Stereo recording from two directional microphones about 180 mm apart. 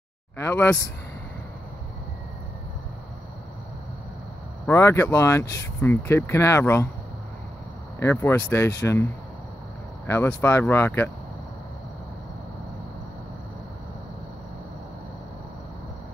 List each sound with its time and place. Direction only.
0.4 s speech: 10° left (ahead or behind)
4.6 s speech: 15° left (ahead or behind)
8.0 s speech: 15° left (ahead or behind)